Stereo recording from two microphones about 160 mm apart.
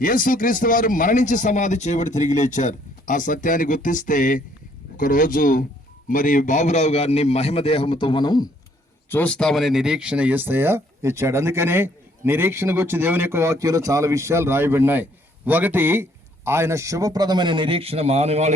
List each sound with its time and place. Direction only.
0.0 s a man's voice: 60° left (ahead or behind); by 8.4 s 25° left (ahead or behind)
9.0 s a man's voice: 10° left (ahead or behind); by 18.5 s 45° right (ahead or behind)